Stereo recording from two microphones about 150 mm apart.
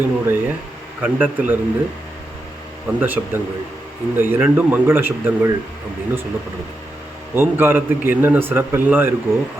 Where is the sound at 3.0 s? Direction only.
10° right (ahead or behind).